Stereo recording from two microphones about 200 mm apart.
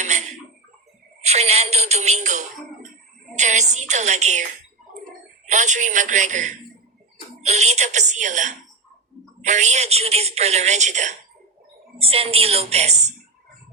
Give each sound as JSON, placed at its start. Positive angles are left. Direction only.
{"t": 0.0, "sound": "tick-tock", "side_deg": -35}
{"t": 1.2, "sound": "a woman's voice", "side_deg": -35}
{"t": 5.5, "sound": "a woman's voice", "side_deg": -35}